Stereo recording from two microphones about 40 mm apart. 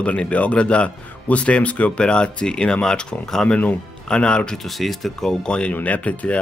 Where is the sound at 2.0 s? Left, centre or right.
Left.